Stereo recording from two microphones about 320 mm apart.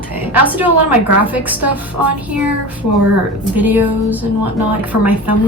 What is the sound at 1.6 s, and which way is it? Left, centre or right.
Speech, right.